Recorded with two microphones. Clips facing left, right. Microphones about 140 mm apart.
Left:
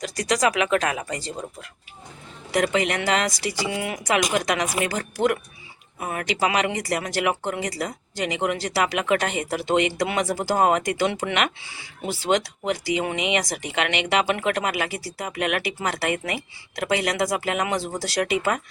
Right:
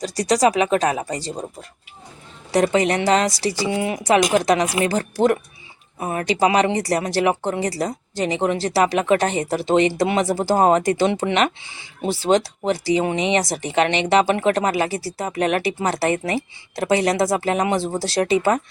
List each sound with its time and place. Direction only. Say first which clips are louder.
0.0 s speech: right 5 dB; 30° right (ahead or behind)
2.5 s speech: right 5 dB; 35° right (ahead or behind)